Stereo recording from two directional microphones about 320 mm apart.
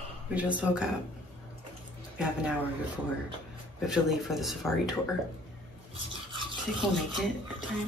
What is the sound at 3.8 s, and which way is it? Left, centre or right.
Speech, centre.